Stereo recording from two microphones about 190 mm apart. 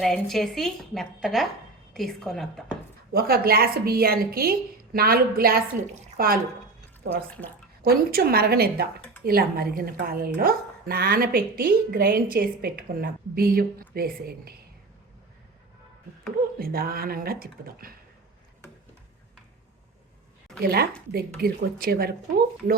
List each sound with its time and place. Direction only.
0.0 s a woman's voice: centre (ahead or behind)
3.1 s a woman's voice: 55° right (ahead or behind)
7.8 s a woman's voice: 55° right (ahead or behind)
16.6 s a woman's voice: 50° right (ahead or behind)
20.7 s a woman's voice: 55° right (ahead or behind)